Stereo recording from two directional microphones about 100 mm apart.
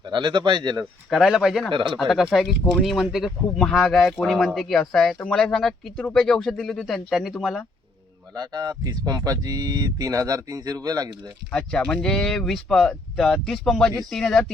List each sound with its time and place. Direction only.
0.0 s speech: 50° right (ahead or behind)
1.1 s speech: centre (ahead or behind)
8.4 s speech: 40° right (ahead or behind)
11.5 s speech: 10° left (ahead or behind)